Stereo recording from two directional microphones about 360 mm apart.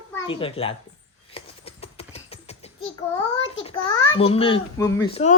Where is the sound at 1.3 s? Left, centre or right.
Centre.